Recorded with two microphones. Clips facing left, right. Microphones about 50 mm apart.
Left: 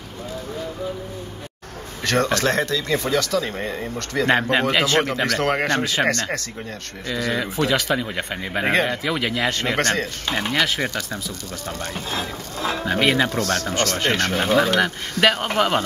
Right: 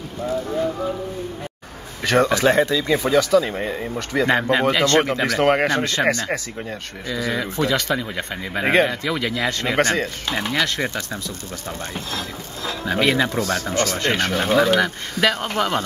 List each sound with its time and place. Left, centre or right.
2.0 s speech: centre
4.3 s speech: centre
4.7 s speech: centre
5.0 s speech: centre
7.1 s speech: centre
10.2 s speech: centre
12.1 s speech: left
12.9 s speech: centre
13.3 s speech: centre
13.7 s speech: centre
15.3 s speech: left